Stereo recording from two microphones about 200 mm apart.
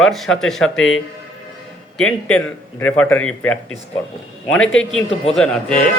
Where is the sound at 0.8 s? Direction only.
75° left (ahead or behind).